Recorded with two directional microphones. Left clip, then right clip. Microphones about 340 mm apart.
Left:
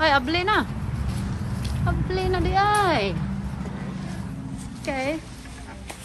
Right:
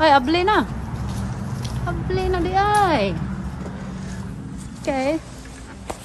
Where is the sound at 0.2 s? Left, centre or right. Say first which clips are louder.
Right 4 dB; centre.